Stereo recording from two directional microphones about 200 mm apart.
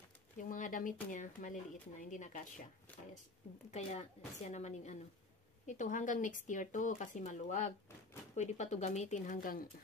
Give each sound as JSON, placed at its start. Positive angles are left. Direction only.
{"t": 0.4, "sound": "speech", "side_deg": 40}
{"t": 3.7, "sound": "speech", "side_deg": 35}